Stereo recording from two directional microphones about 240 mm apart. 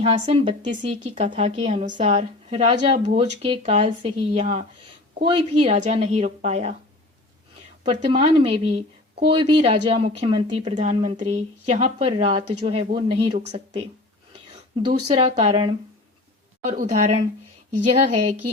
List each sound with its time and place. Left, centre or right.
0.0 s a woman's voice: right
7.9 s a woman's voice: right
16.7 s a woman's voice: right